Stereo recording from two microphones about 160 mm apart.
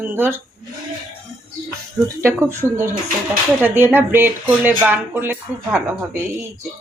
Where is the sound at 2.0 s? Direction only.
15° right (ahead or behind).